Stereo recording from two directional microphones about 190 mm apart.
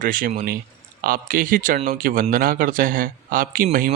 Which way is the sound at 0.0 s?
45° right (ahead or behind).